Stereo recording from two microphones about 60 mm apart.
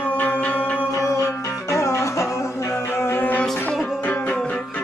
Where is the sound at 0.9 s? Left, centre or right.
Left.